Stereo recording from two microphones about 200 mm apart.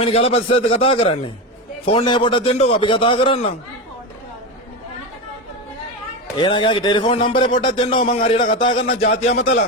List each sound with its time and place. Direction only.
0.0 s a man's voice: 30° left (ahead or behind)
6.3 s a man's voice: 25° left (ahead or behind)
7.3 s a man's voice: 40° left (ahead or behind)
7.8 s a man's voice: 25° left (ahead or behind)
8.0 s a man's voice: 40° left (ahead or behind)
8.5 s a man's voice: 25° left (ahead or behind)
8.9 s a man's voice: 50° left (ahead or behind)